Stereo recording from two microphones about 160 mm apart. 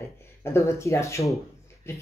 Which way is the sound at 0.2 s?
15° left (ahead or behind).